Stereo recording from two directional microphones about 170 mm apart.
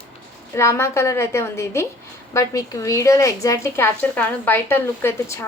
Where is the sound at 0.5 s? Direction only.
15° left (ahead or behind).